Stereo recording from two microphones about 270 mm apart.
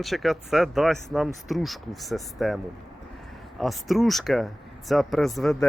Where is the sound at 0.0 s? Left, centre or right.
Centre.